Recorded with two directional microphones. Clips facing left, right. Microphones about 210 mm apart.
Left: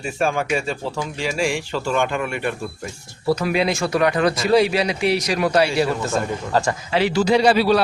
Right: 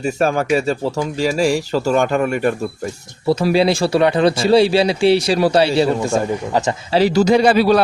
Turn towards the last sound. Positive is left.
turn(degrees=-45)  # may be behind; listen again after turning